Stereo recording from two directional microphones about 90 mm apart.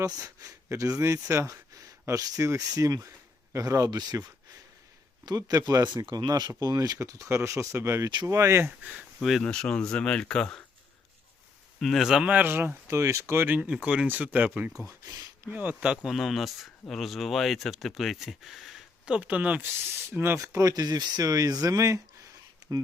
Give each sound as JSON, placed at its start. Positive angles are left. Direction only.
{"t": 0.0, "sound": "speech", "side_deg": -40}
{"t": 8.8, "sound": "speech", "side_deg": -15}
{"t": 9.2, "sound": "speech", "side_deg": 5}
{"t": 11.8, "sound": "speech", "side_deg": 0}
{"t": 14.8, "sound": "speech", "side_deg": -40}
{"t": 15.4, "sound": "speech", "side_deg": -15}
{"t": 16.0, "sound": "speech", "side_deg": 0}
{"t": 19.1, "sound": "speech", "side_deg": -15}